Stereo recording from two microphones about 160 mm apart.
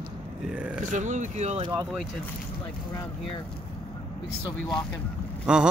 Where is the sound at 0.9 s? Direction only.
50° right (ahead or behind).